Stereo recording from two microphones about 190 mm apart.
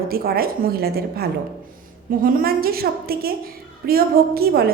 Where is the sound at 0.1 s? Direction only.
50° right (ahead or behind).